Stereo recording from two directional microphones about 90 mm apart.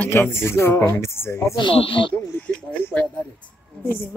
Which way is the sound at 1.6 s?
75° left (ahead or behind).